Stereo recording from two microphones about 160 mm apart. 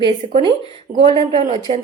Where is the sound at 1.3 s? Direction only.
35° right (ahead or behind).